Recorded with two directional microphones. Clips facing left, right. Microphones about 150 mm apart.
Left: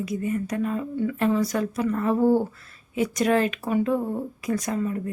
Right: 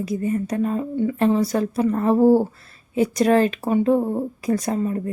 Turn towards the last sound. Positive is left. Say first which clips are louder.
# right 4 dB
turn(degrees=-35)  # may be behind; listen again after turning